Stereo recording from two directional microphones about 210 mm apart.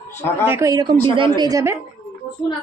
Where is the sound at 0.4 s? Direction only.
10° right (ahead or behind).